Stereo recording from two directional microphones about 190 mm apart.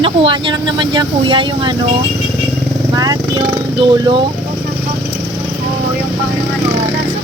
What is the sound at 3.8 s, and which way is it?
Speech, 25° right (ahead or behind).